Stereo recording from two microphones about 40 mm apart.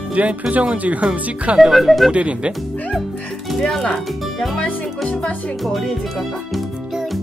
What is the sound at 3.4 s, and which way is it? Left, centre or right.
Speech, centre.